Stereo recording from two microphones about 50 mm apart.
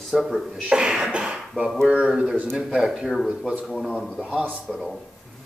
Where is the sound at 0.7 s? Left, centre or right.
Centre.